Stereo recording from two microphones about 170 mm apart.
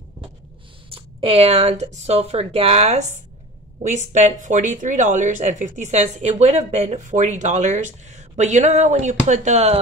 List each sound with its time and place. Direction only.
0.8 s speech: 35° right (ahead or behind)